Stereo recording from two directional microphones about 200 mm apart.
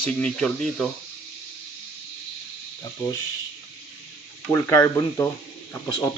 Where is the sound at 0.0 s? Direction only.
5° left (ahead or behind).